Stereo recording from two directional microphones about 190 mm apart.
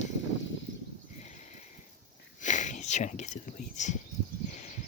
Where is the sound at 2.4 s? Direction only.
40° left (ahead or behind).